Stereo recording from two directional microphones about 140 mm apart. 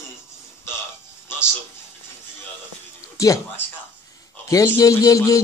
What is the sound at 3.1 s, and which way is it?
A man's voice, 25° left (ahead or behind).